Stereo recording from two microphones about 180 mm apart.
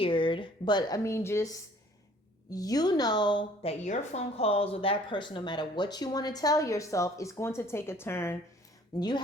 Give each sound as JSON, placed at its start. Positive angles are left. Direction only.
{"t": 0.0, "sound": "a woman's voice", "side_deg": 30}
{"t": 2.5, "sound": "a woman's voice", "side_deg": 20}
{"t": 9.0, "sound": "a woman's voice", "side_deg": 25}